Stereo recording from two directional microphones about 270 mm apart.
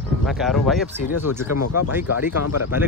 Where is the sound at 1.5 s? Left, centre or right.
Left.